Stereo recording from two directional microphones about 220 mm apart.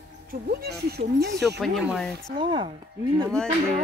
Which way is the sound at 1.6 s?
Centre (ahead or behind).